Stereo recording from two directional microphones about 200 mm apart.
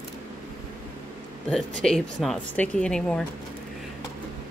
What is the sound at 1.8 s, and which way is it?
A woman's voice, centre (ahead or behind).